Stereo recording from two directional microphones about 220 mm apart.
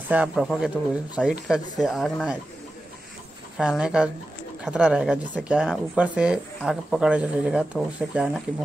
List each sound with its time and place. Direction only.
0.1 s speech: 5° right (ahead or behind)
3.5 s speech: centre (ahead or behind)